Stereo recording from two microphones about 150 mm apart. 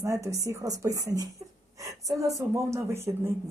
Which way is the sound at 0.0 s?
20° right (ahead or behind).